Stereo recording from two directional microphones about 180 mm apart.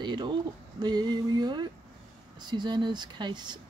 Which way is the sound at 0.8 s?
25° right (ahead or behind).